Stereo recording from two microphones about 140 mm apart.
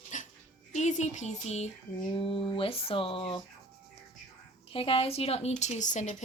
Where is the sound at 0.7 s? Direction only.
55° left (ahead or behind).